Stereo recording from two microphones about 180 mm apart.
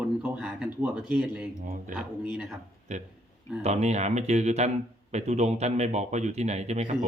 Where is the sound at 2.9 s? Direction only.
40° right (ahead or behind).